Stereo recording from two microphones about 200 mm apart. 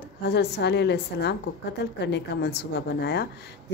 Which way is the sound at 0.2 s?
60° left (ahead or behind).